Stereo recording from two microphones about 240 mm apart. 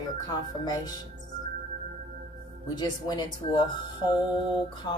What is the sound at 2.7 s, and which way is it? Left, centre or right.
A woman's voice, centre.